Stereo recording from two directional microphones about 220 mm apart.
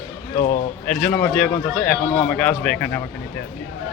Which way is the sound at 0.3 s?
40° left (ahead or behind).